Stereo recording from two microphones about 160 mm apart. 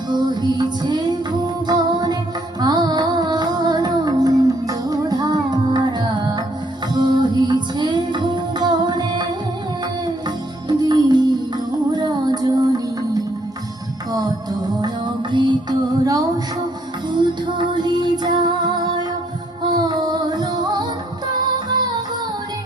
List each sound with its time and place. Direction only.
0.1 s music: 25° right (ahead or behind)
10.2 s music: 25° right (ahead or behind)
14.8 s music: 30° right (ahead or behind)
17.1 s music: 30° right (ahead or behind)